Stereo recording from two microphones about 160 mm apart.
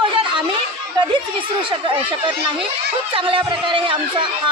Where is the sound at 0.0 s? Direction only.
30° right (ahead or behind).